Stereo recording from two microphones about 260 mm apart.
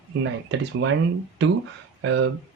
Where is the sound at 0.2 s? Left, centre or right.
Right.